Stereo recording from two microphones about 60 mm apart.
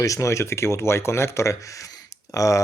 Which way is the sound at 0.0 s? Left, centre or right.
Left.